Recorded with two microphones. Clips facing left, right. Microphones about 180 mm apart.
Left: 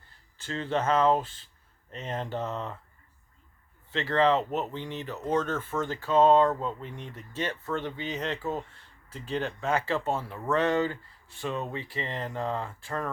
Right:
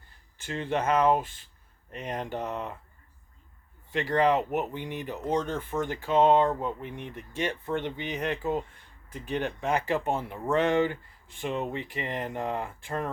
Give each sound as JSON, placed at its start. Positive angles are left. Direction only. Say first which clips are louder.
{"t": 0.4, "sound": "speech", "louder": "even", "side_deg": -15}
{"t": 3.9, "sound": "speech", "louder": "even", "side_deg": -15}